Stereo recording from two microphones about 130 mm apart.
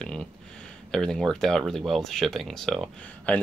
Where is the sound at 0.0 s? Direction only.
5° left (ahead or behind).